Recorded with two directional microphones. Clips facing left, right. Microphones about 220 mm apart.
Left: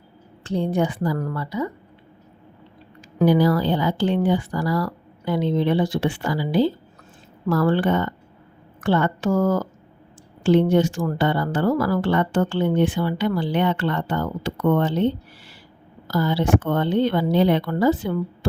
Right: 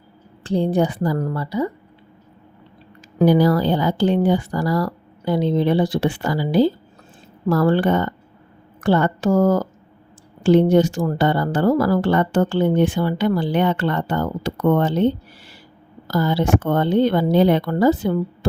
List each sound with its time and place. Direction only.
0.4 s a woman's voice: 35° right (ahead or behind)
3.2 s a woman's voice: 40° right (ahead or behind)